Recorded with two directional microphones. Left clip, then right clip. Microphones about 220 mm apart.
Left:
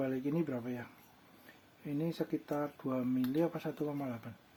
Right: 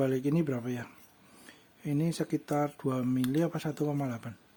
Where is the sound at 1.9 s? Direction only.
50° right (ahead or behind).